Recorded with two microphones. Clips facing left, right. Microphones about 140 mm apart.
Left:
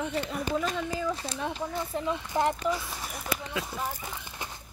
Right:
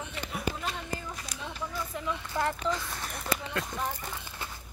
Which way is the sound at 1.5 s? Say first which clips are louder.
Left 4 dB; 30° left (ahead or behind).